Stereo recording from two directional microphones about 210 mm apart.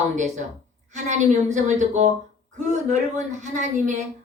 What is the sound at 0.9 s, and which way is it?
A woman's voice, 35° right (ahead or behind).